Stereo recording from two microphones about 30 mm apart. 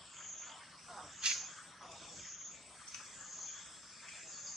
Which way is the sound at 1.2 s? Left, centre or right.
Right.